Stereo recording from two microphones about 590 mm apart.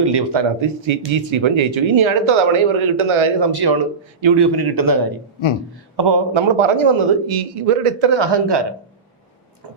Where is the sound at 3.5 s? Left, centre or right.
Right.